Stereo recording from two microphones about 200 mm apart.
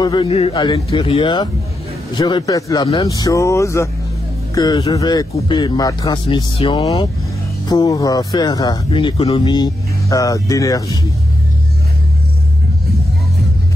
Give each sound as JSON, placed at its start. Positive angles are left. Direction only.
{"t": 0.0, "sound": "speech", "side_deg": 25}